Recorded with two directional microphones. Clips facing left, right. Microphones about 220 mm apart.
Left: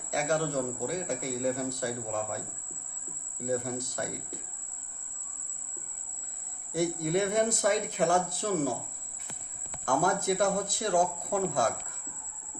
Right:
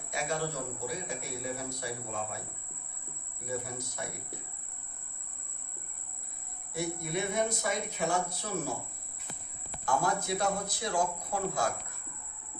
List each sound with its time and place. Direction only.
0.1 s a man's voice: 50° left (ahead or behind)
3.4 s a man's voice: 50° left (ahead or behind)
6.7 s a man's voice: 50° left (ahead or behind)
9.8 s a man's voice: 50° left (ahead or behind)